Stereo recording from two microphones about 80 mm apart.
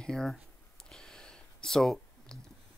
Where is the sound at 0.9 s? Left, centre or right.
Centre.